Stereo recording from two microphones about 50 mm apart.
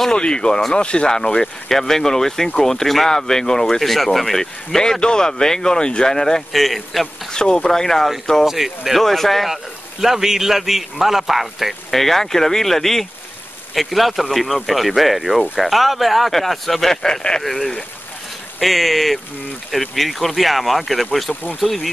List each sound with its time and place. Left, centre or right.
0.0 s speech: centre
7.3 s speech: centre
8.5 s speech: centre
9.0 s a man's voice: centre
17.4 s a man's voice: centre